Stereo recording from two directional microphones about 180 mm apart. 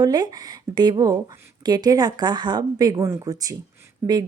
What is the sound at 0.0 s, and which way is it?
Speech, 20° right (ahead or behind).